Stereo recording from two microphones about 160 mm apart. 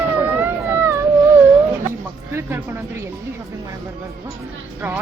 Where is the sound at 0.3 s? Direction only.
15° right (ahead or behind).